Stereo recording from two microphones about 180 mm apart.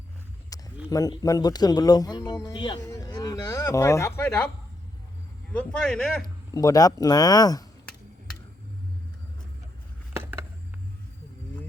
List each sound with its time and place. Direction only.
0.5 s a sound: 20° left (ahead or behind)
0.9 s speech: 20° left (ahead or behind)
5.5 s speech: 5° left (ahead or behind)
6.2 s speech: 20° left (ahead or behind)